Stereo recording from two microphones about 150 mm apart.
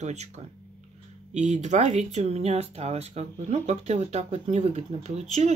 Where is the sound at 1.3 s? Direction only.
50° right (ahead or behind).